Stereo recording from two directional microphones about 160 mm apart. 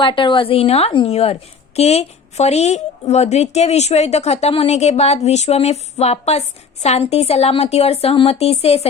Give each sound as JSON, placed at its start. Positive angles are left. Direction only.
{"t": 0.0, "sound": "a woman's voice", "side_deg": 30}